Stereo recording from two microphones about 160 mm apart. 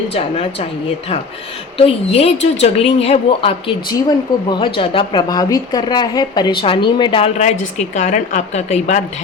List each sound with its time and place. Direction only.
0.1 s a woman's voice: 40° left (ahead or behind)
1.8 s a woman's voice: 40° left (ahead or behind)